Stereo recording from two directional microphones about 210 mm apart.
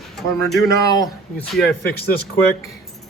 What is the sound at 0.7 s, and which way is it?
Speech, 15° left (ahead or behind).